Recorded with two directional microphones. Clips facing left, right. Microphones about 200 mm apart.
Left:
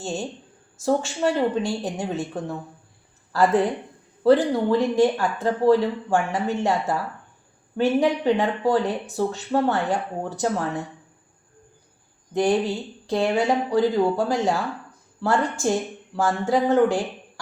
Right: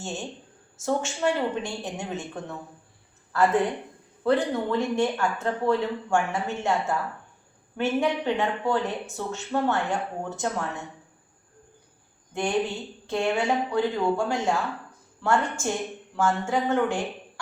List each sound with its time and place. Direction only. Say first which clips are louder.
0.8 s speech: left 4 dB; 35° left (ahead or behind)
4.2 s speech: left 6 dB; 35° left (ahead or behind)
12.3 s speech: left 5 dB; 35° left (ahead or behind)